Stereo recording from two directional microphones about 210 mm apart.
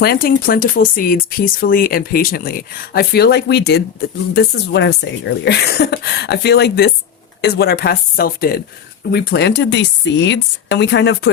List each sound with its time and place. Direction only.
0.0 s speech: 45° left (ahead or behind)